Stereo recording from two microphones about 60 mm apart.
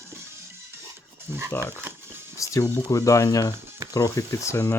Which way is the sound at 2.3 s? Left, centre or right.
Left.